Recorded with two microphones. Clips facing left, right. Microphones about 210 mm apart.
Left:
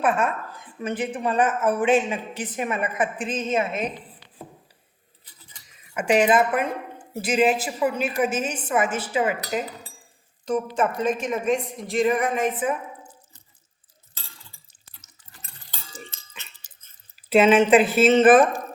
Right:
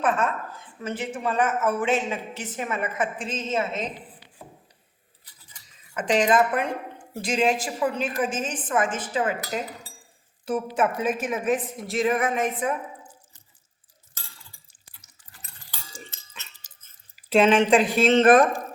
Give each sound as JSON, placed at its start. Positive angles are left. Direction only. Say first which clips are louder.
{"t": 0.0, "sound": "speech", "louder": "left 2 dB", "side_deg": 15}
{"t": 5.9, "sound": "speech", "louder": "left 2 dB", "side_deg": 10}
{"t": 10.4, "sound": "speech", "louder": "left 1 dB", "side_deg": -5}
{"t": 14.7, "sound": "water", "louder": "left 2 dB", "side_deg": -15}
{"t": 16.0, "sound": "a sound", "louder": "left 2 dB", "side_deg": 15}
{"t": 17.2, "sound": "speech", "louder": "left 2 dB", "side_deg": 5}